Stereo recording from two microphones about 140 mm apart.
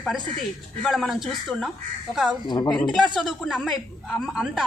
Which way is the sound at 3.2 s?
Centre (ahead or behind).